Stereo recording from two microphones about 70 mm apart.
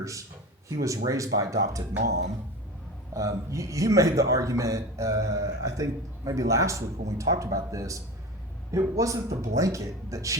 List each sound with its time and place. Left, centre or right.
0.0 s a man's voice: right
3.2 s a man's voice: right